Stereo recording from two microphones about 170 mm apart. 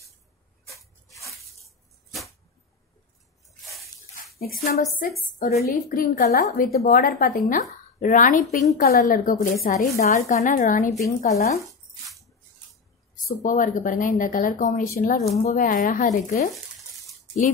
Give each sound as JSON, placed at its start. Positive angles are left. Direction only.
{"t": 4.4, "sound": "a woman's voice", "side_deg": 65}
{"t": 4.7, "sound": "a woman's voice", "side_deg": 50}
{"t": 13.1, "sound": "a woman's voice", "side_deg": 50}
{"t": 15.2, "sound": "a woman's voice", "side_deg": 45}